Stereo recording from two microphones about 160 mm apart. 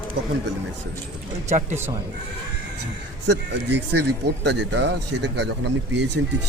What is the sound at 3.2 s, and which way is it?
Speech, 90° right.